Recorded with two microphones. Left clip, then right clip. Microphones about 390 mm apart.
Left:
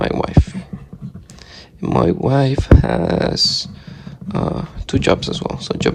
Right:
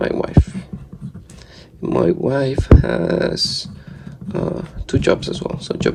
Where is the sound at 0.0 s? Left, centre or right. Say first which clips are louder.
Left 1 dB; centre.